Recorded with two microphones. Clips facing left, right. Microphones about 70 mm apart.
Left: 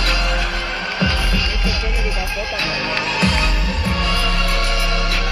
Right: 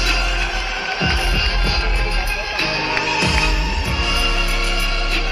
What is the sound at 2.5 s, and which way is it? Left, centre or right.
Music, right.